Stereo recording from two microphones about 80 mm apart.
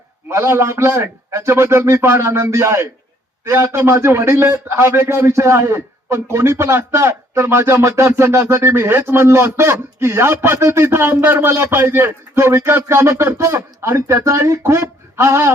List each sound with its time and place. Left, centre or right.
0.3 s a man's voice: right